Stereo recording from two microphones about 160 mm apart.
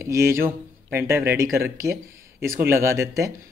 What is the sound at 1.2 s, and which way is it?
Speech, 80° right.